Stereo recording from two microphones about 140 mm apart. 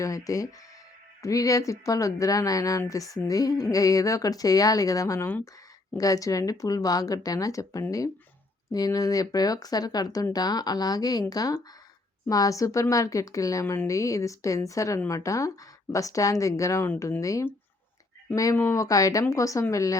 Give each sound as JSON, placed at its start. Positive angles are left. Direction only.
{"t": 0.0, "sound": "speech", "side_deg": 25}
{"t": 18.5, "sound": "speech", "side_deg": 20}